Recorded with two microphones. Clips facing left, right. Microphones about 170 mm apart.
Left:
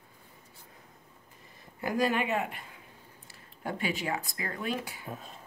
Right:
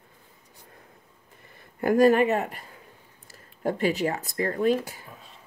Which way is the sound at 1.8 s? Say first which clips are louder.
Right 10 dB; 50° right (ahead or behind).